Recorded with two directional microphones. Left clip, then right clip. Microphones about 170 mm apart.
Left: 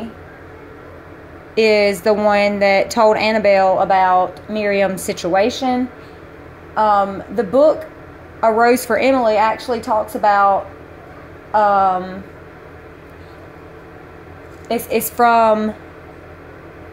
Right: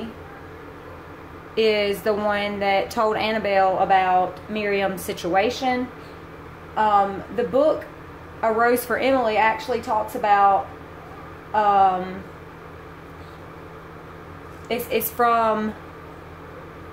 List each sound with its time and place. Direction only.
1.5 s a woman's voice: 30° left (ahead or behind)
11.5 s a woman's voice: 30° left (ahead or behind)
14.9 s speech: 30° left (ahead or behind)